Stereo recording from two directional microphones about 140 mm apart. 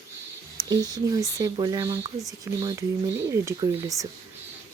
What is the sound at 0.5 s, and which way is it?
Speech, 30° right (ahead or behind).